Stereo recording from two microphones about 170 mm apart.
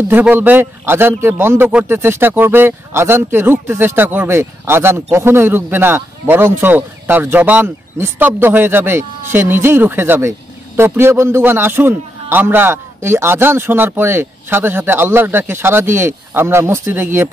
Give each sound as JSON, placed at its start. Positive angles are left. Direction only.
{"t": 0.1, "sound": "a man's voice", "side_deg": -10}